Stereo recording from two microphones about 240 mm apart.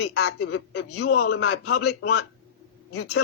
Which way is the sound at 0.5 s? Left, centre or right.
Left.